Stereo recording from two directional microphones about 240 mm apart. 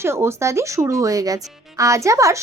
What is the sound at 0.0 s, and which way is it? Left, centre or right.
Speech, centre.